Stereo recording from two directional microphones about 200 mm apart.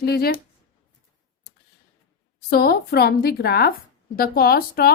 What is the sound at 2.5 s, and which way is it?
A woman's voice, 50° left (ahead or behind).